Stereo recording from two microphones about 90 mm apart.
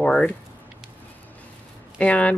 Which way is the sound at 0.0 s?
10° left (ahead or behind).